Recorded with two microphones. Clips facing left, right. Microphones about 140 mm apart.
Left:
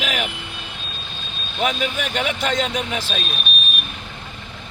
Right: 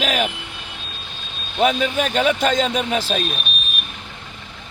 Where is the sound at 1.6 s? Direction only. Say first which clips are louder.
Right 5 dB; 35° right (ahead or behind).